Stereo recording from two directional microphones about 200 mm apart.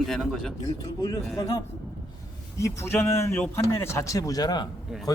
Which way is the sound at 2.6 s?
15° left (ahead or behind).